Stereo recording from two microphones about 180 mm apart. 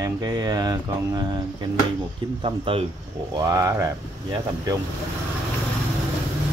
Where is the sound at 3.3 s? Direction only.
20° right (ahead or behind).